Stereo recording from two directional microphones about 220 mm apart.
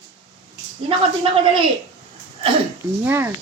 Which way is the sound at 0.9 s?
25° right (ahead or behind).